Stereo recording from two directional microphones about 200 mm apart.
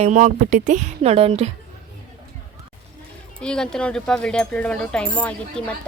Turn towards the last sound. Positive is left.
turn(degrees=5)  # may be behind; listen again after turning